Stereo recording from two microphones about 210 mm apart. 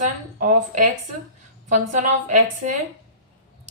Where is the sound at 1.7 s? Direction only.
35° right (ahead or behind).